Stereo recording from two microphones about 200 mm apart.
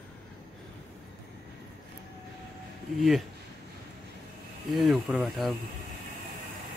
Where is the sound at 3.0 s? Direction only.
Centre (ahead or behind).